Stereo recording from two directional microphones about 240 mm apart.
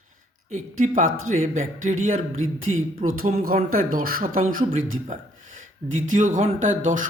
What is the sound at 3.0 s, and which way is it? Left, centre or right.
Speech, right.